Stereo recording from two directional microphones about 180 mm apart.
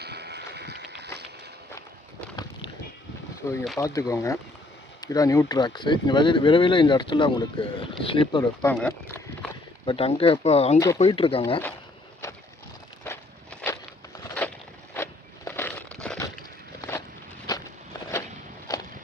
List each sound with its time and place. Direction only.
0.0 s a sound: 65° right (ahead or behind)
3.4 s speech: 15° left (ahead or behind)
8.6 s speech: 10° left (ahead or behind)
9.8 s speech: 30° left (ahead or behind)
13.1 s walk: 10° left (ahead or behind)
14.3 s a sound: 10° left (ahead or behind)
17.5 s walk: 20° left (ahead or behind)